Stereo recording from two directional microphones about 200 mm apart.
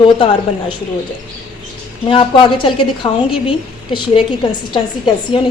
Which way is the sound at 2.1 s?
25° left (ahead or behind).